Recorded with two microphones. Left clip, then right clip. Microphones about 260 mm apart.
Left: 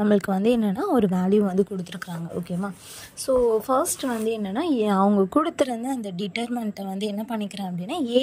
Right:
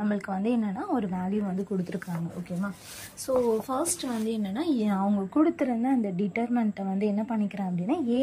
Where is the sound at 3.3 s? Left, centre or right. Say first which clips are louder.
Left 6 dB; centre.